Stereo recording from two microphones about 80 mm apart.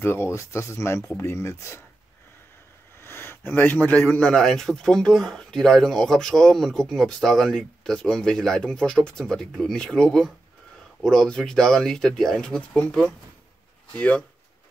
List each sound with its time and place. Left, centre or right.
0.0 s speech: left
3.0 s a sound: left
3.9 s speech: centre